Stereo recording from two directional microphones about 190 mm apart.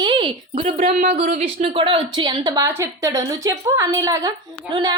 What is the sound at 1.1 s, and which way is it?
A woman's voice, 35° right (ahead or behind).